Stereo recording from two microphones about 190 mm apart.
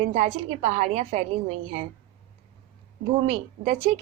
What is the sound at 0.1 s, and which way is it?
A woman's voice, 35° right (ahead or behind).